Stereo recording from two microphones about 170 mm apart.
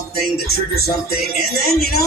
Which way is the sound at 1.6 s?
65° left (ahead or behind).